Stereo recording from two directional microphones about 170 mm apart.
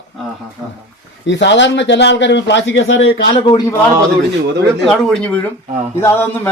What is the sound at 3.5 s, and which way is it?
Speech, 25° left (ahead or behind).